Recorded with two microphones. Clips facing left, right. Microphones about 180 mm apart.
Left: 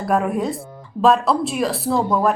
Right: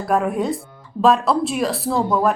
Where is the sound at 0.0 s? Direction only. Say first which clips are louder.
Even; centre (ahead or behind).